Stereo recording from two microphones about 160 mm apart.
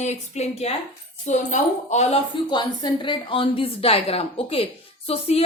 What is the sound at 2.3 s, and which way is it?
A woman's voice, 30° left (ahead or behind).